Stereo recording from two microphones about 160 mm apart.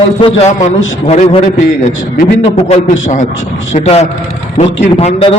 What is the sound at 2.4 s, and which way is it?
A man's voice, 40° left (ahead or behind).